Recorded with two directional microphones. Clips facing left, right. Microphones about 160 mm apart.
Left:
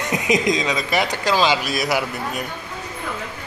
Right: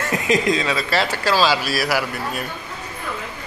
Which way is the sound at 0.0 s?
20° left (ahead or behind).